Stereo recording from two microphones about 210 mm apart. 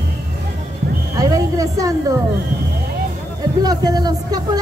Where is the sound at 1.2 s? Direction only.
15° right (ahead or behind).